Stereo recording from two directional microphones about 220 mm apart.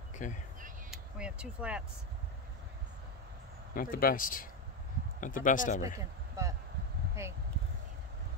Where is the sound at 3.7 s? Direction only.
40° left (ahead or behind).